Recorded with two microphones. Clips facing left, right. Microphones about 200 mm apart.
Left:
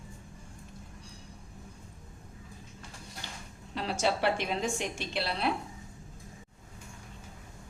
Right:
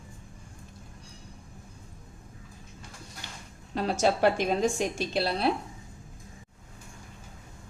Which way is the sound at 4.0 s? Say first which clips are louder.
Right 5 dB; 45° right (ahead or behind).